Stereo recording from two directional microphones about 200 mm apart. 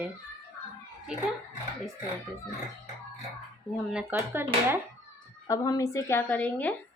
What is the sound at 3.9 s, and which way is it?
Speech, 10° right (ahead or behind).